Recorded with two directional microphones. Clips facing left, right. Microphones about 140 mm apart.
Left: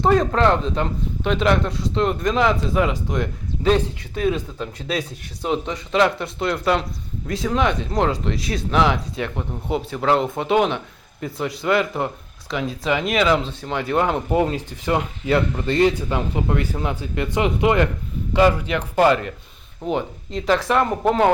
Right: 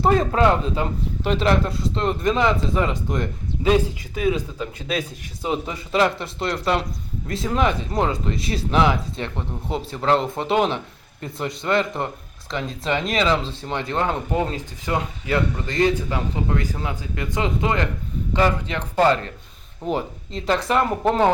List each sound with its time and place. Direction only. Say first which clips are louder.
0.0 s speech: left 1 dB; 5° right (ahead or behind)
13.9 s speech: left 4 dB; 15° left (ahead or behind)
15.8 s speech: left 1 dB; 15° left (ahead or behind)
19.8 s speech: left 1 dB; centre (ahead or behind)